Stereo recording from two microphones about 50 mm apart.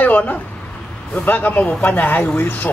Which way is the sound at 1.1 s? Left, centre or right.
Left.